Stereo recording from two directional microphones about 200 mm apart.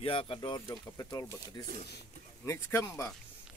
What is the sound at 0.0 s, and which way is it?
Speech, 25° left (ahead or behind).